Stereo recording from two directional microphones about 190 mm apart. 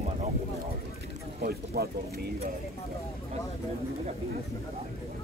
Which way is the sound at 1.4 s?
55° right (ahead or behind).